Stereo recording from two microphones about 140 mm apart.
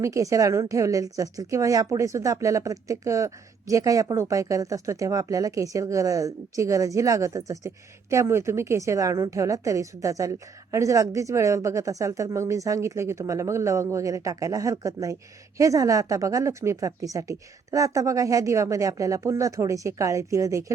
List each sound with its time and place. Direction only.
0.0 s a woman's voice: 20° right (ahead or behind)